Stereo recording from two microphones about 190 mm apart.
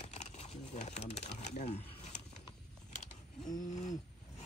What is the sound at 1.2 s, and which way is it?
Speech, 35° left (ahead or behind).